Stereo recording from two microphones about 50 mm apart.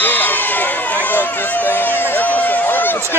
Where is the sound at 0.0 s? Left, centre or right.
Left.